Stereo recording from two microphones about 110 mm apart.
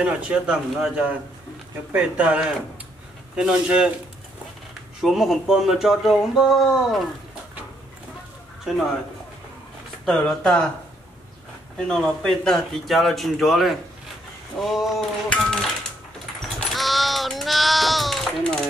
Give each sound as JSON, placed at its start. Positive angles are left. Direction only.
{"t": 0.0, "sound": "a man's voice", "side_deg": -10}
{"t": 5.0, "sound": "speech", "side_deg": 0}
{"t": 8.7, "sound": "speech", "side_deg": 0}
{"t": 10.0, "sound": "speech", "side_deg": 5}
{"t": 11.9, "sound": "speech", "side_deg": 5}
{"t": 16.4, "sound": "a sound", "side_deg": 0}